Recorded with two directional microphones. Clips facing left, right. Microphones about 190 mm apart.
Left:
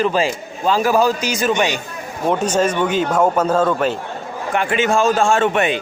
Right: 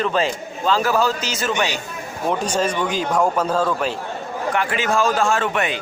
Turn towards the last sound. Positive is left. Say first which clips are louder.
# left 5 dB
turn(degrees=25)  # may be behind; listen again after turning